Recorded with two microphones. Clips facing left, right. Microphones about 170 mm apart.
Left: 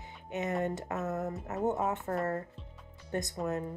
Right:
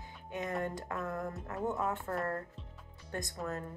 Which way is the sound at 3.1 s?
20° left (ahead or behind).